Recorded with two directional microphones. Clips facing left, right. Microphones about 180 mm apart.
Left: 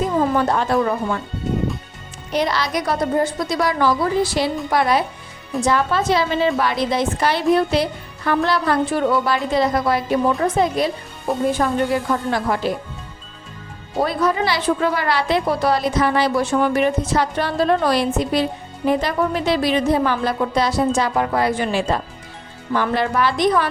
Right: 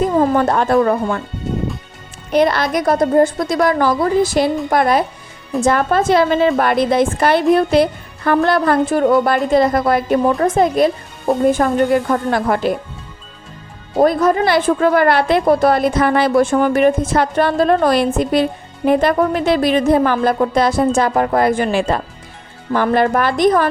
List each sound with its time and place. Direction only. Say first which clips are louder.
0.2 s a woman's voice: right 3 dB; 50° right (ahead or behind)
2.3 s a woman's voice: right 6 dB; 55° right (ahead or behind)
14.0 s a woman's voice: right 6 dB; 45° right (ahead or behind)